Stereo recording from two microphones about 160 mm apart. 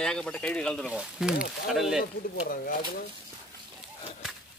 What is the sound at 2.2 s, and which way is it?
Speech, 65° left (ahead or behind).